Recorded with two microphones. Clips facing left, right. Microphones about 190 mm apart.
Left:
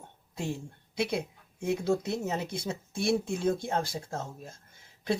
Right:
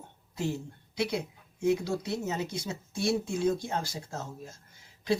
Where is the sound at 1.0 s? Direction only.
55° left (ahead or behind).